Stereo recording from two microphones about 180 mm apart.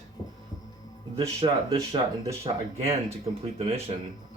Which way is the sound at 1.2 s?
20° right (ahead or behind).